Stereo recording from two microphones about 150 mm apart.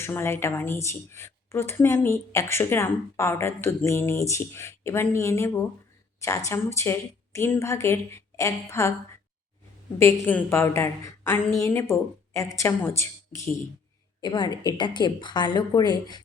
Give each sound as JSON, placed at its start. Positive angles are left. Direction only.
{"t": 0.0, "sound": "a woman's voice", "side_deg": 15}
{"t": 10.0, "sound": "a woman's voice", "side_deg": 15}
{"t": 14.2, "sound": "a woman's voice", "side_deg": 30}